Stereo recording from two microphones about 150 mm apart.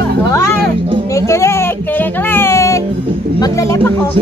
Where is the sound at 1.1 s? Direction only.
20° left (ahead or behind).